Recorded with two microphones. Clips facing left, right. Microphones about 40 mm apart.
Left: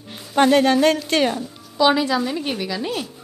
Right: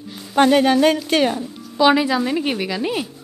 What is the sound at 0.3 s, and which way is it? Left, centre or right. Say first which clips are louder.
A woman's voice: right 1 dB; centre.